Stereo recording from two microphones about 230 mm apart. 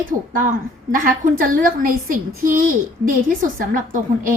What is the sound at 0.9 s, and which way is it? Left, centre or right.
A woman's voice, right.